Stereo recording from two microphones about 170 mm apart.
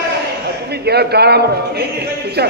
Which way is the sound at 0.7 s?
70° right (ahead or behind).